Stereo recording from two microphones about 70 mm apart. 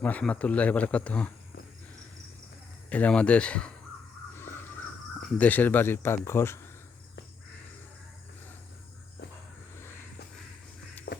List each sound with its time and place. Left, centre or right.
0.0 s speech: centre
2.9 s speech: centre
4.4 s crow: left
5.4 s speech: left